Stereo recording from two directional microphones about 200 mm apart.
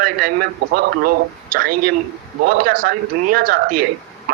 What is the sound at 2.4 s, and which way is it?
A man's voice, 45° right (ahead or behind).